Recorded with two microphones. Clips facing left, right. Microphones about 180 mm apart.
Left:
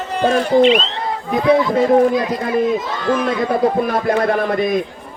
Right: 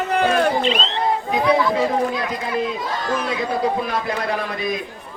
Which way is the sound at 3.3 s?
50° left (ahead or behind).